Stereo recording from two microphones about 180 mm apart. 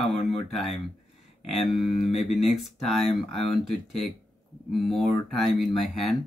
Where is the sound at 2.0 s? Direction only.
40° left (ahead or behind).